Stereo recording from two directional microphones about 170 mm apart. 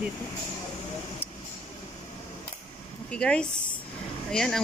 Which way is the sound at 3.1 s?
5° left (ahead or behind).